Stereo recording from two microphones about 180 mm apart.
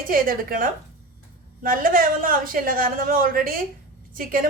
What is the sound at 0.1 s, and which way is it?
A woman's voice, 50° right (ahead or behind).